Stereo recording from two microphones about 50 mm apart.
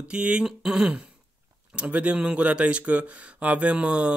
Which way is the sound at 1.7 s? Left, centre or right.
Right.